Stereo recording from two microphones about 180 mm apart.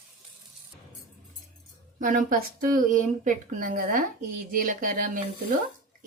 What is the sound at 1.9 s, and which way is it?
Speech, 50° right (ahead or behind).